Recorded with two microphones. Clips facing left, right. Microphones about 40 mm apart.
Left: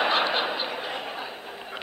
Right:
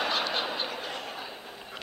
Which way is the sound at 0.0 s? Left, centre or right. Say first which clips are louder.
Left 6 dB; left.